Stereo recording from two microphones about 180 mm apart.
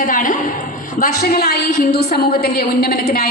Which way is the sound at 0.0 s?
50° left (ahead or behind).